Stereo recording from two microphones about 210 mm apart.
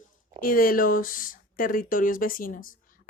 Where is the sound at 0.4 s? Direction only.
45° left (ahead or behind).